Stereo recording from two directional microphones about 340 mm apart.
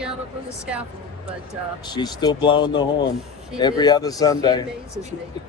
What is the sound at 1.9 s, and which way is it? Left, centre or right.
A man's voice, centre.